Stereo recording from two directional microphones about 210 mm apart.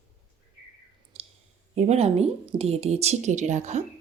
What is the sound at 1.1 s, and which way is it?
Clicking, 30° right (ahead or behind).